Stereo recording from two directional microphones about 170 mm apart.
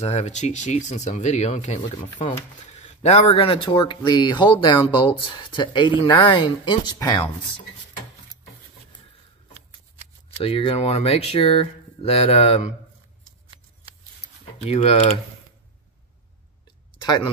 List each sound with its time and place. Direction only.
0.0 s speech: 40° left (ahead or behind)
10.3 s speech: 35° left (ahead or behind)
14.6 s speech: 35° left (ahead or behind)
17.0 s speech: 25° left (ahead or behind)